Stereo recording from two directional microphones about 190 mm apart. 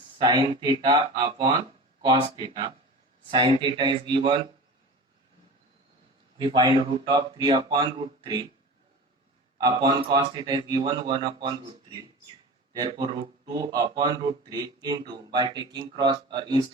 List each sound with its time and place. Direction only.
0.2 s speech: 25° right (ahead or behind)
6.4 s speech: 25° right (ahead or behind)
9.6 s speech: 20° right (ahead or behind)